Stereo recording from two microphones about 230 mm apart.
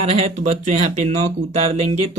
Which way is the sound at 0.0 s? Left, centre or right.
Right.